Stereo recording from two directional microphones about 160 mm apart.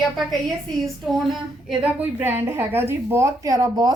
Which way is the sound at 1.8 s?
10° right (ahead or behind).